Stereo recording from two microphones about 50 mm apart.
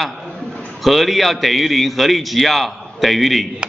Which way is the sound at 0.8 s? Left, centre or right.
Centre.